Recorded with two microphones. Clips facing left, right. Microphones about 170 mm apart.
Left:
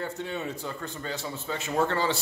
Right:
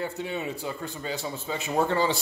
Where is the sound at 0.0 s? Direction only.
10° right (ahead or behind).